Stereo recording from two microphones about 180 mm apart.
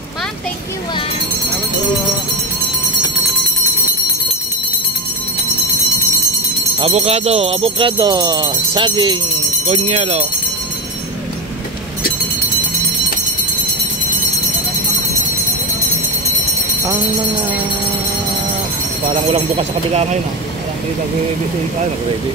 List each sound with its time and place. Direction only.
6.8 s jingle bell: 35° right (ahead or behind)
9.7 s speech: 35° right (ahead or behind)
19.1 s speech: 35° right (ahead or behind)